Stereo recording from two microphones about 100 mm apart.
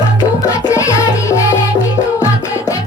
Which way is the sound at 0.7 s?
35° left (ahead or behind).